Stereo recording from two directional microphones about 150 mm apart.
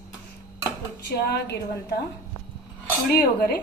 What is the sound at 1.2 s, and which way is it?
Speech, 90° left.